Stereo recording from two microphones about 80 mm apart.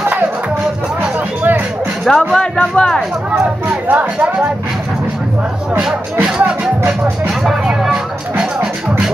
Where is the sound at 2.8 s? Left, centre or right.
Centre.